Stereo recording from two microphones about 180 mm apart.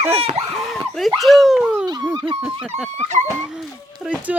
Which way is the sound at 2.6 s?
5° right (ahead or behind).